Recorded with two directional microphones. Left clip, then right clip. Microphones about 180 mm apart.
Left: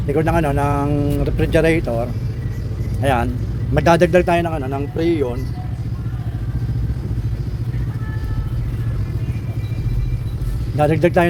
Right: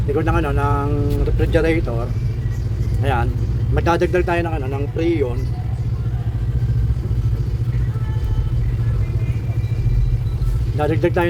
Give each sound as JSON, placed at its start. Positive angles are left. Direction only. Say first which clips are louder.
{"t": 0.1, "sound": "speech", "louder": "left 2 dB", "side_deg": 35}
{"t": 10.8, "sound": "speech", "louder": "left 4 dB", "side_deg": 40}